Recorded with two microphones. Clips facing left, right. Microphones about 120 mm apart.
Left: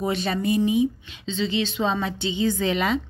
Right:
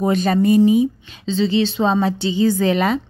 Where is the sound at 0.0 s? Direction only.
45° right (ahead or behind).